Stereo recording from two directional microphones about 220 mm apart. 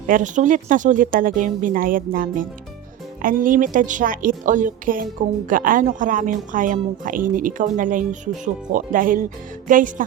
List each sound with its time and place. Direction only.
0.1 s a woman's voice: 35° right (ahead or behind)